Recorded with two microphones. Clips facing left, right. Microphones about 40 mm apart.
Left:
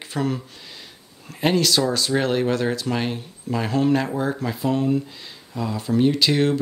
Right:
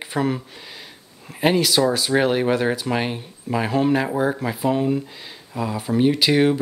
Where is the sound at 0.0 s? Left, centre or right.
Centre.